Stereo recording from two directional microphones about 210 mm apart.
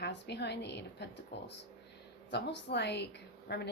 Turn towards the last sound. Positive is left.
turn(degrees=50)  # may be behind; listen again after turning